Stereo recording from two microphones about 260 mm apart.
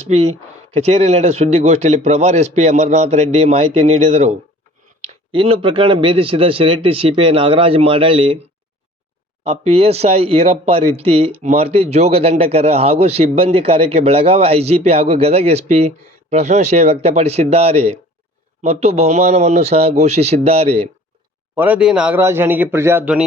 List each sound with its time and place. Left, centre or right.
0.1 s speech: right
9.5 s speech: right
21.5 s speech: centre